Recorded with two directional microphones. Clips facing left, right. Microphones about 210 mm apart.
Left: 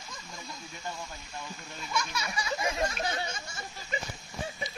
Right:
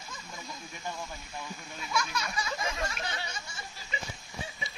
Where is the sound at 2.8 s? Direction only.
45° left (ahead or behind).